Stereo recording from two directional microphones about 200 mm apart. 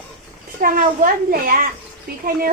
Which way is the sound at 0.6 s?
45° right (ahead or behind).